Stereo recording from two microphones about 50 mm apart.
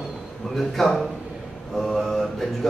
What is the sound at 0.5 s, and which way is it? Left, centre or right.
A man's voice, centre.